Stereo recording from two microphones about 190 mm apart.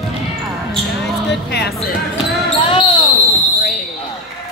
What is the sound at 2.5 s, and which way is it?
Basketball bounce, 30° left (ahead or behind).